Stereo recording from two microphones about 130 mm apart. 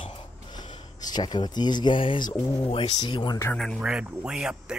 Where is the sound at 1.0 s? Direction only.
35° left (ahead or behind).